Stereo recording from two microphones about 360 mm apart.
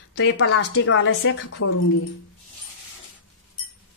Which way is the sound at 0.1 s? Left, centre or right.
Left.